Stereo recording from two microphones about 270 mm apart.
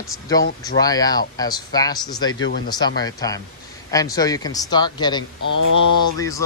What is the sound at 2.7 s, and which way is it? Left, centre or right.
Speech, centre.